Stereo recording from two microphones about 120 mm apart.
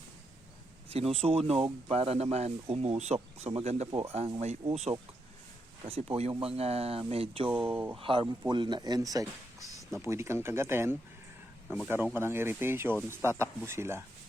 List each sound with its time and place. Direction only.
0.9 s speech: 55° right (ahead or behind)
7.5 s speech: 15° right (ahead or behind)
7.9 s speech: 45° right (ahead or behind); by 14.0 s 20° right (ahead or behind)